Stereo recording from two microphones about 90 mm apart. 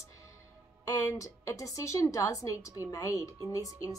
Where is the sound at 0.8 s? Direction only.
40° left (ahead or behind).